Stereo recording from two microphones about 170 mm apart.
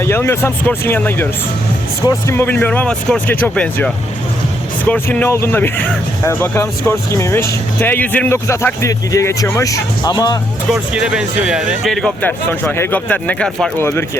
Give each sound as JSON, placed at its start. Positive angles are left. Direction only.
{"t": 0.0, "sound": "speech", "side_deg": 15}
{"t": 10.7, "sound": "speech", "side_deg": -5}